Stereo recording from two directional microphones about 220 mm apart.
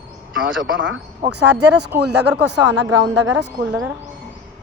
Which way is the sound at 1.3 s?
90° right.